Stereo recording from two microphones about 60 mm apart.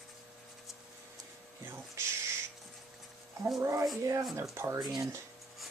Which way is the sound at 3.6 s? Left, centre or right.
Right.